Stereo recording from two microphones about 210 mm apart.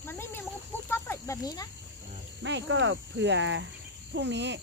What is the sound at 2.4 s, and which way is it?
Speech, 60° right (ahead or behind).